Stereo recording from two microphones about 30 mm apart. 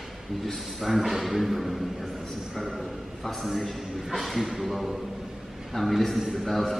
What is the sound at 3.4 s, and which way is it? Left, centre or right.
A man's voice, centre.